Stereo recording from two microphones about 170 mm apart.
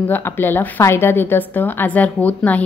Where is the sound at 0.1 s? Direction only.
10° left (ahead or behind).